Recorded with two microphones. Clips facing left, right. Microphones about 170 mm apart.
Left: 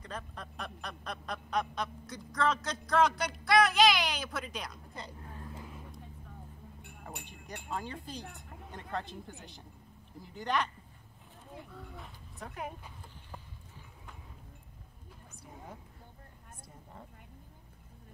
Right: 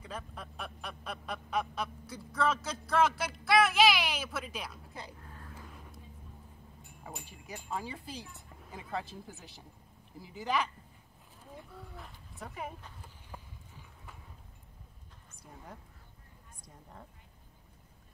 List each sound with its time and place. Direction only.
0.0 s speech: 5° right (ahead or behind)
5.7 s vehicle: 5° left (ahead or behind)
6.8 s chime: 65° left (ahead or behind)
7.7 s speech: 5° right (ahead or behind)
11.7 s speech: centre (ahead or behind)